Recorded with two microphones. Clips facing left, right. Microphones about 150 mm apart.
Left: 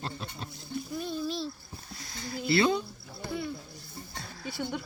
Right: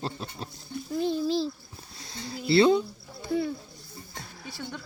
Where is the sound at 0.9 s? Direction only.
25° right (ahead or behind).